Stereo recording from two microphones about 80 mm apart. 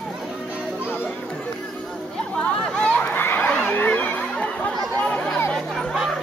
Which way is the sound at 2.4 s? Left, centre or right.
Centre.